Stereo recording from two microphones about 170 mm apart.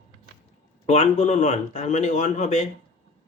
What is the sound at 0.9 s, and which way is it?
Speech, 40° left (ahead or behind).